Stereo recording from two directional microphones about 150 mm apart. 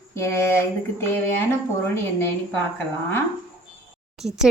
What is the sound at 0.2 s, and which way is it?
Speech, 15° left (ahead or behind).